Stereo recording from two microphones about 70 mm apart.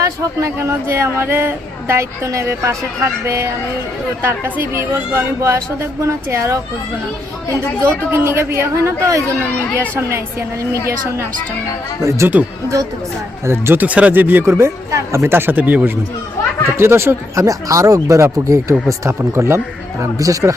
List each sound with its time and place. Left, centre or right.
0.0 s speech: right
4.2 s speech: right
4.7 s speech: right
7.8 s speech: right
12.0 s speech: right
13.4 s speech: right
13.7 s speech: centre
14.4 s speech: right
16.7 s speech: right
17.4 s speech: right
20.1 s speech: right